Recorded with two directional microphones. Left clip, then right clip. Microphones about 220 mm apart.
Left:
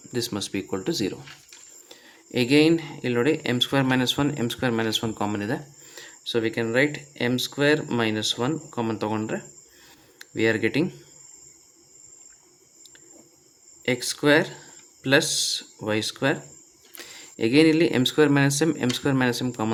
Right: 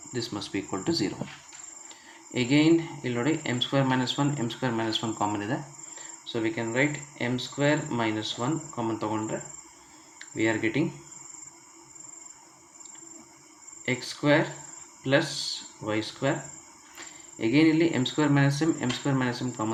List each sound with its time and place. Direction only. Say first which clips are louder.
0.1 s speech: left 4 dB; 40° left (ahead or behind)
13.8 s speech: left 4 dB; 40° left (ahead or behind)